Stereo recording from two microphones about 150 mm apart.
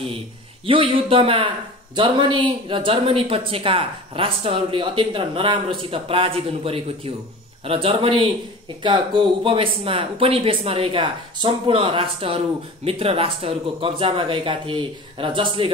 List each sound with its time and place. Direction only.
0.7 s speech: 35° right (ahead or behind)